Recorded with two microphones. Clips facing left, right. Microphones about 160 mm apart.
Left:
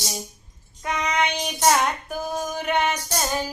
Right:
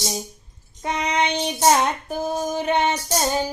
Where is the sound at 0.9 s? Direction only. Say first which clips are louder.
Right 2 dB; 30° right (ahead or behind).